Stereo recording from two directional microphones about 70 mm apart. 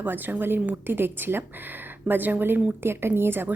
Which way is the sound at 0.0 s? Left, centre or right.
Right.